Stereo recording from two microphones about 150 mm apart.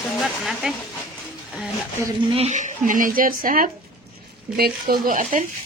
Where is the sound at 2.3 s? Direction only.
50° right (ahead or behind); by 3.7 s 65° right (ahead or behind).